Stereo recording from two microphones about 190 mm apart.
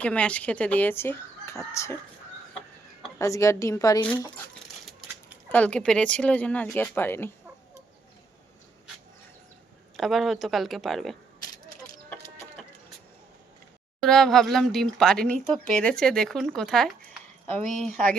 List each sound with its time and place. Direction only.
0.0 s speech: 5° left (ahead or behind)
3.2 s speech: 15° left (ahead or behind)
4.9 s a sound: centre (ahead or behind)
5.5 s speech: 5° left (ahead or behind)
10.0 s speech: centre (ahead or behind)
14.0 s speech: centre (ahead or behind)